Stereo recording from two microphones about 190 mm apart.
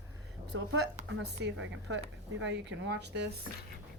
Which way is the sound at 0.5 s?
90° right.